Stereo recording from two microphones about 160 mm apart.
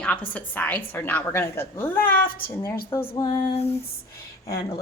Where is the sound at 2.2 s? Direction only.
65° left (ahead or behind).